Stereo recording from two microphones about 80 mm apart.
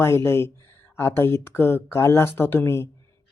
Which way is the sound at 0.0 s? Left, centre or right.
Left.